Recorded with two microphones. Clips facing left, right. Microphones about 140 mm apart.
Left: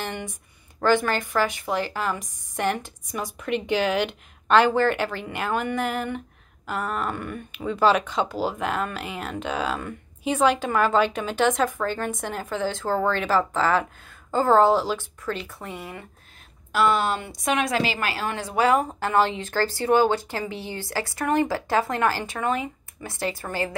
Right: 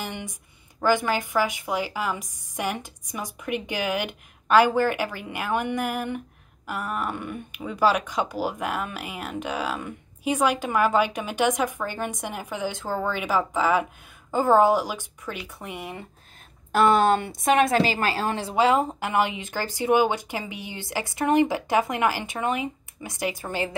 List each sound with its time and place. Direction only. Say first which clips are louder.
0.8 s speech: left 1 dB; 10° right (ahead or behind)
16.7 s a woman's voice: right 3 dB; 50° right (ahead or behind); by 23.7 s 20° right (ahead or behind)